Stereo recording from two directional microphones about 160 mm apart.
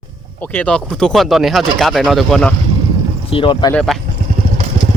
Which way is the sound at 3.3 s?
30° left (ahead or behind).